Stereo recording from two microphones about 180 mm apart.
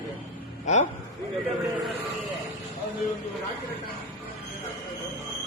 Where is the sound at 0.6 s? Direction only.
40° left (ahead or behind).